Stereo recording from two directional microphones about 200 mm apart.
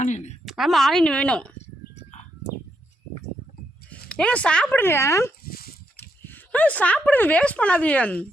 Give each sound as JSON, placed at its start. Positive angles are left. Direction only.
{"t": 0.0, "sound": "a sound", "side_deg": 35}
{"t": 0.4, "sound": "speech", "side_deg": 0}
{"t": 2.0, "sound": "bird", "side_deg": 35}
{"t": 4.1, "sound": "speech", "side_deg": 5}
{"t": 5.5, "sound": "dog", "side_deg": 50}
{"t": 6.0, "sound": "speech", "side_deg": 10}